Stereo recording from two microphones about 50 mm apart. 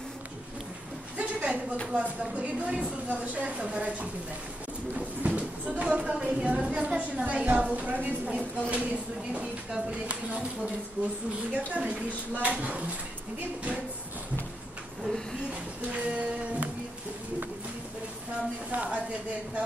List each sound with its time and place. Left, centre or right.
1.1 s a sound: right
1.9 s a woman's voice: right
5.2 s a woman's voice: right
9.7 s a woman's voice: centre
10.0 s a woman's voice: right
15.9 s a woman's voice: right
18.7 s a woman's voice: right